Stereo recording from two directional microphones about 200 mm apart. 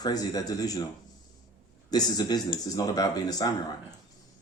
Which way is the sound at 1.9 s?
20° left (ahead or behind).